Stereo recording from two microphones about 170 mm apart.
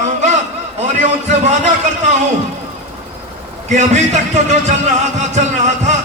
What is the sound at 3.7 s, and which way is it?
Speech, 45° right (ahead or behind).